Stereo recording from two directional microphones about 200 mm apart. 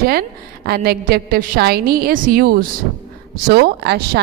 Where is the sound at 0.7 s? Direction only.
50° right (ahead or behind).